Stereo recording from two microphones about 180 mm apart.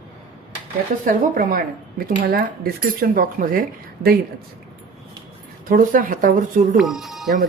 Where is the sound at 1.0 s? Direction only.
50° right (ahead or behind).